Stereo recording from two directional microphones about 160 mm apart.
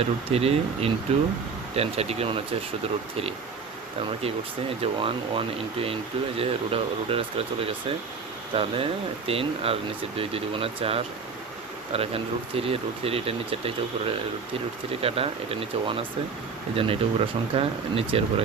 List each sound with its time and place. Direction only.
0.0 s speech: 40° right (ahead or behind)
4.8 s speech: 35° right (ahead or behind)
8.5 s speech: 35° right (ahead or behind)
15.0 s speech: 35° right (ahead or behind)